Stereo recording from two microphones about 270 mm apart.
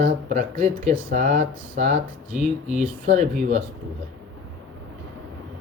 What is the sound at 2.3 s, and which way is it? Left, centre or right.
Speech, centre.